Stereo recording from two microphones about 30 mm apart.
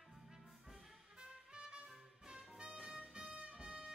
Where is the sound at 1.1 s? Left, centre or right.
Right.